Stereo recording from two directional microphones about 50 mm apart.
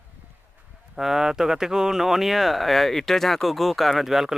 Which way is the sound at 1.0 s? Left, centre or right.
Centre.